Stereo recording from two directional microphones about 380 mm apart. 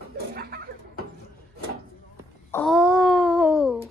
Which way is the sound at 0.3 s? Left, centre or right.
Right.